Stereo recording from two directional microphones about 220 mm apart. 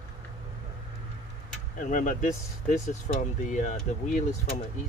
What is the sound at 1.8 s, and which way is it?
Speech, 35° left (ahead or behind).